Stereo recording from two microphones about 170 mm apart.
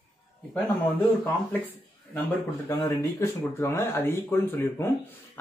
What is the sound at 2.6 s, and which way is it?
Speech, 15° left (ahead or behind).